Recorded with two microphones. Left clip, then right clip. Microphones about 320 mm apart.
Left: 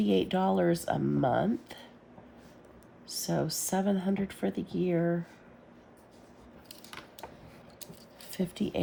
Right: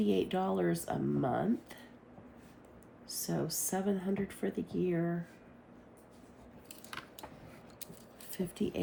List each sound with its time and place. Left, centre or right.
0.0 s speech: left
3.1 s speech: left
7.0 s a sound: centre
8.5 s speech: left